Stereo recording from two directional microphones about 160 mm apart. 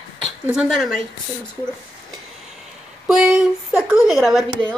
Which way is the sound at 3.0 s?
5° right (ahead or behind).